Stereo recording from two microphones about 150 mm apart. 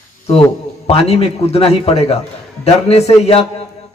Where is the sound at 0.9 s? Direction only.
45° left (ahead or behind).